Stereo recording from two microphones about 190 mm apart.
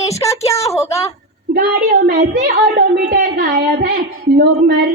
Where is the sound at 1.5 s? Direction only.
50° right (ahead or behind).